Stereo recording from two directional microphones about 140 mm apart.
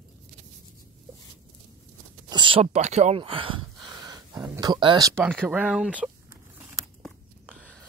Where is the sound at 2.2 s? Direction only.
35° right (ahead or behind).